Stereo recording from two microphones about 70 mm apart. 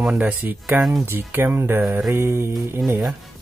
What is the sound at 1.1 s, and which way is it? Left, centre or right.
Speech, right.